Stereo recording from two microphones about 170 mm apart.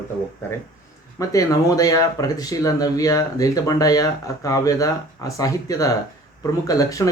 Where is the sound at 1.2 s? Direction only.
20° left (ahead or behind).